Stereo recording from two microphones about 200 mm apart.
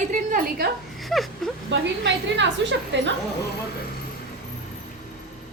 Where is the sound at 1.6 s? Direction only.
65° right (ahead or behind).